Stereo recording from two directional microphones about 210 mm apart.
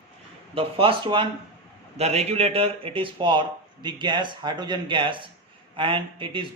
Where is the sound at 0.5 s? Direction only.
25° right (ahead or behind).